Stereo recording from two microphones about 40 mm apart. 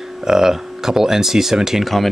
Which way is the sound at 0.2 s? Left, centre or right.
Centre.